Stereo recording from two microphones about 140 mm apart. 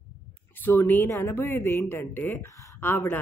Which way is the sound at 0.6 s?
20° left (ahead or behind).